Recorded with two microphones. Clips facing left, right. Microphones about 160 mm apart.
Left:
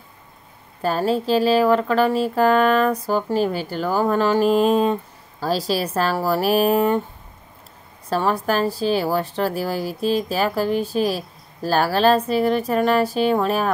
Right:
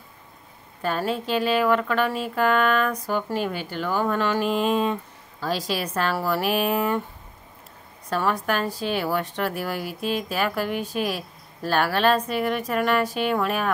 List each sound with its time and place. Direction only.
0.8 s a woman's voice: 35° left (ahead or behind)
8.1 s a woman's voice: 30° left (ahead or behind)